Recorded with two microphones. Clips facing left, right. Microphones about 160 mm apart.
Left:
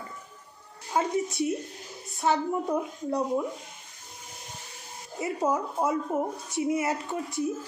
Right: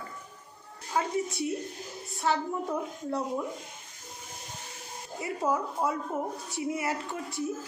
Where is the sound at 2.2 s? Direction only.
20° left (ahead or behind).